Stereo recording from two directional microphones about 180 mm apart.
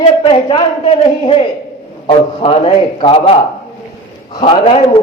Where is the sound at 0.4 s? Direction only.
30° left (ahead or behind).